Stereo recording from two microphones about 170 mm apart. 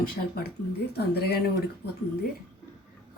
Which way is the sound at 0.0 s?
65° left (ahead or behind).